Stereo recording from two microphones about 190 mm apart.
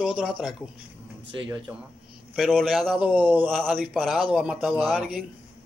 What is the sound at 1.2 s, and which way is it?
Speech, 70° right (ahead or behind).